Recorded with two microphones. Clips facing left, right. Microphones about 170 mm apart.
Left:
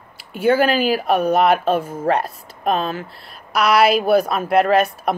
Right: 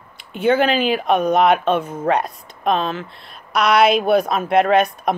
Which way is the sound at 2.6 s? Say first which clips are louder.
Right 1 dB; 45° left (ahead or behind).